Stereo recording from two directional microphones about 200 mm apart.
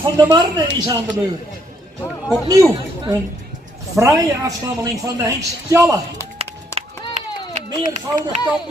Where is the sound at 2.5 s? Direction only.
15° right (ahead or behind).